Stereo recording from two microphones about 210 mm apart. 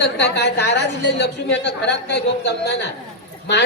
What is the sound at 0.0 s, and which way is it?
A woman's voice, 55° left (ahead or behind).